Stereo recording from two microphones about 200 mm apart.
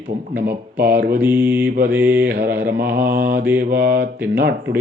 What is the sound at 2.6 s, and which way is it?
Mantra, 50° right (ahead or behind).